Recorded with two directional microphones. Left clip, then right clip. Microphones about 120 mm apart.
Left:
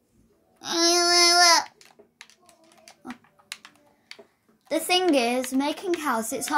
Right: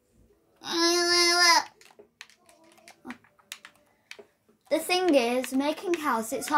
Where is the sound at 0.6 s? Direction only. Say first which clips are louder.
Left 3 dB; 50° left (ahead or behind).